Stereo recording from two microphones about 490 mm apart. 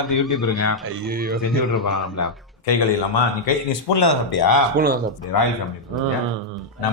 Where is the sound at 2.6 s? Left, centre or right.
Left.